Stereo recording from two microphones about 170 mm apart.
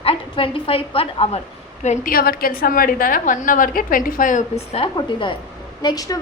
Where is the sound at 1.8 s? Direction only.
50° left (ahead or behind).